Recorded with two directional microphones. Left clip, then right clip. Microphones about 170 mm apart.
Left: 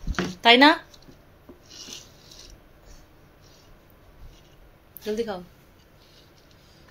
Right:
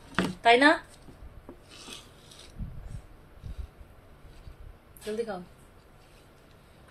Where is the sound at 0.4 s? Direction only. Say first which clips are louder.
Left 5 dB; 50° left (ahead or behind).